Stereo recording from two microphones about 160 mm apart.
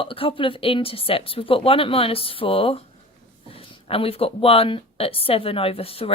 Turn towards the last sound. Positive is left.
turn(degrees=35)  # may be behind; listen again after turning